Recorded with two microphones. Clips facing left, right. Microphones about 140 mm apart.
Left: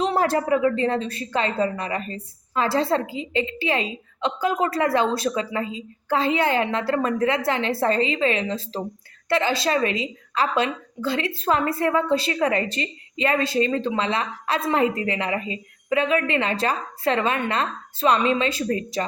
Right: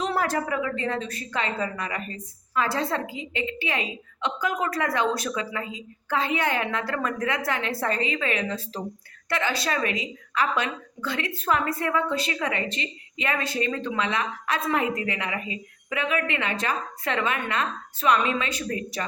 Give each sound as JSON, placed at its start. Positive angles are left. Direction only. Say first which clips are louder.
{"t": 0.0, "sound": "a woman's voice", "louder": "left 4 dB", "side_deg": 30}